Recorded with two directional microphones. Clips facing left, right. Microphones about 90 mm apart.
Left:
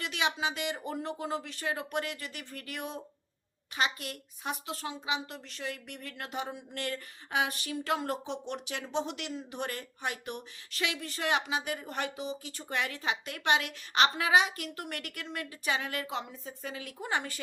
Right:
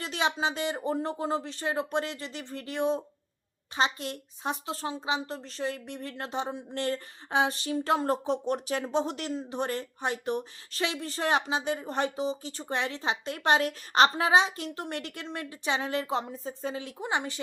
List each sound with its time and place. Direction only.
0.0 s a woman's voice: 35° right (ahead or behind)